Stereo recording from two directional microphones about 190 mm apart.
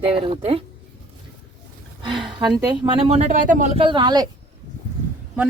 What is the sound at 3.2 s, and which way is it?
Speech, 45° right (ahead or behind).